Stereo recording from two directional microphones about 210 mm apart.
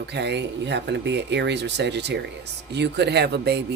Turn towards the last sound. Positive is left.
turn(degrees=-55)  # may be behind; listen again after turning